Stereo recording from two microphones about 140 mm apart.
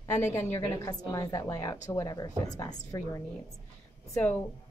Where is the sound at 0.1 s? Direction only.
20° left (ahead or behind).